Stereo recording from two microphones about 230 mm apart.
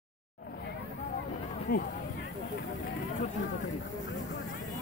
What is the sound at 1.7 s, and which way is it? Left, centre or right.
Speech, left.